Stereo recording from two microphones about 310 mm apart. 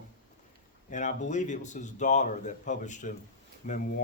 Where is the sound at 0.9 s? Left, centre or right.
Left.